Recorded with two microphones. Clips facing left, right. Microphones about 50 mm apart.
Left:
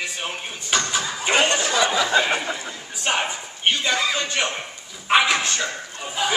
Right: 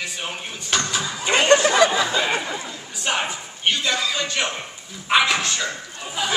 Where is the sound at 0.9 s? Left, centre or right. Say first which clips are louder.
Even; centre.